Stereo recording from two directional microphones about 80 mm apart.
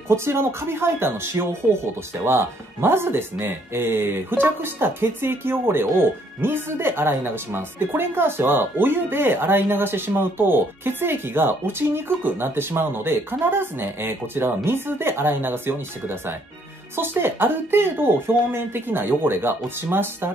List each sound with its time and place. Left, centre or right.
0.1 s speech: right